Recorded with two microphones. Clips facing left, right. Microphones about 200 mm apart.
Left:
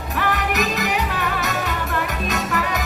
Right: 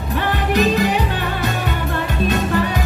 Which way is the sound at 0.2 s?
30° right (ahead or behind).